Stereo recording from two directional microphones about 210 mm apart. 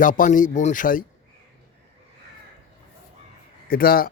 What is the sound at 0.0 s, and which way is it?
Speech, 40° left (ahead or behind).